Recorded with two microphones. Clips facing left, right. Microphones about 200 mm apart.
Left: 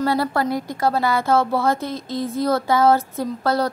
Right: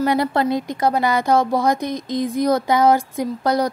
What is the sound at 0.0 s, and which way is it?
A woman's voice, 20° right (ahead or behind).